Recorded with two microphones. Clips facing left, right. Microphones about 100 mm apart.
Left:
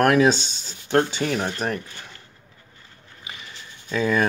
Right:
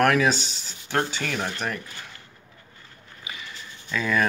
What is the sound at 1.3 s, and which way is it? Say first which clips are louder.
Speech: left 3 dB; 15° left (ahead or behind).